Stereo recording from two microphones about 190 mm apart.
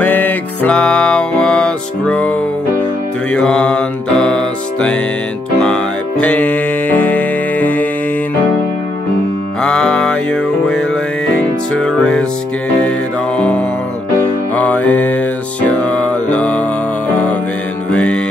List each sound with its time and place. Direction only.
0.0 s music: 10° left (ahead or behind)
9.6 s music: 5° left (ahead or behind)
14.5 s music: 10° left (ahead or behind)
17.9 s mantra: 5° left (ahead or behind)